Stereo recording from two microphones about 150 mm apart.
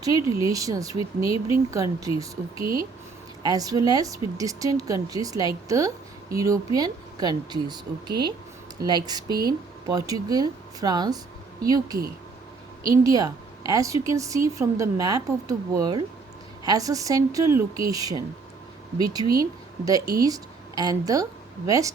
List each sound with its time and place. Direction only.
0.3 s a woman's voice: 25° right (ahead or behind)
12.8 s a woman's voice: 25° right (ahead or behind)